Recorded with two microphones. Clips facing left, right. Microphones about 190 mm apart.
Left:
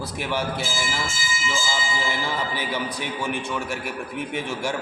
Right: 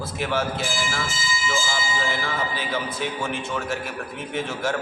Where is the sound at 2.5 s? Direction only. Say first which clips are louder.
Even; 15° left (ahead or behind).